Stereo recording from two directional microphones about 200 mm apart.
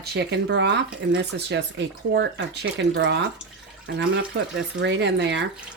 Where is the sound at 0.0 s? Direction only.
55° right (ahead or behind).